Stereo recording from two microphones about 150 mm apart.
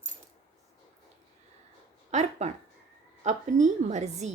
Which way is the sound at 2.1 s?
50° right (ahead or behind).